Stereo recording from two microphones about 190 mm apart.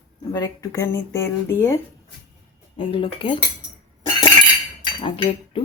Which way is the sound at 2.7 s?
25° left (ahead or behind).